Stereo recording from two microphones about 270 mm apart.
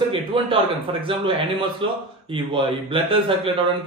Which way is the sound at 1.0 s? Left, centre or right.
Centre.